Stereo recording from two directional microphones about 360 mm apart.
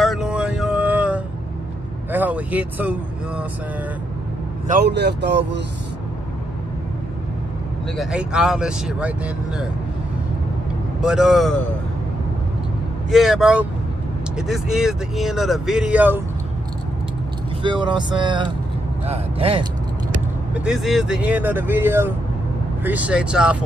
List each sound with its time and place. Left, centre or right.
0.0 s vehicle: centre
2.1 s speech: centre
4.6 s speech: right
8.0 s speech: centre
11.0 s speech: centre
13.1 s speech: centre
17.6 s speech: centre
20.5 s speech: centre